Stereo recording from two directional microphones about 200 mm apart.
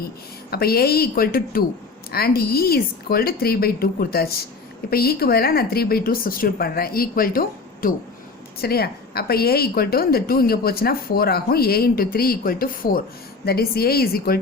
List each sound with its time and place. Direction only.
0.5 s a woman's voice: 50° left (ahead or behind)